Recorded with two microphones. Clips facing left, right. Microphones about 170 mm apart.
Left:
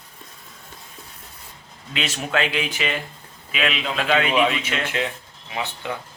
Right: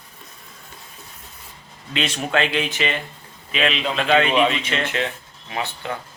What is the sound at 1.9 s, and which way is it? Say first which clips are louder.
A man's voice: right 2 dB; 5° left (ahead or behind).